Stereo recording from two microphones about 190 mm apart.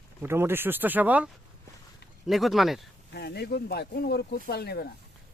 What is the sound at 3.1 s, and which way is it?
Speech, 55° left (ahead or behind).